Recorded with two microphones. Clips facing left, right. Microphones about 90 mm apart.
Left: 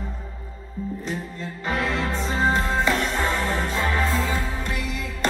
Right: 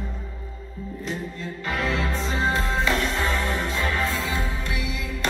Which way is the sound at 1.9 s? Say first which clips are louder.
Left 1 dB; 30° left (ahead or behind).